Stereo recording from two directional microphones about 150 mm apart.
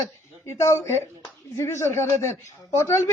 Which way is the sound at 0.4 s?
20° left (ahead or behind).